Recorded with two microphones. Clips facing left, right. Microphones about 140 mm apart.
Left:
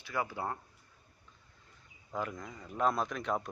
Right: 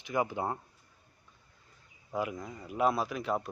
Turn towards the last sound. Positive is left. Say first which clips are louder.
# right 2 dB
turn(degrees=-5)  # may be behind; listen again after turning